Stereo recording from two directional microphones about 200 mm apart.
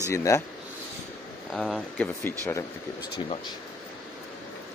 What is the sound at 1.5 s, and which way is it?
Speech, 5° left (ahead or behind).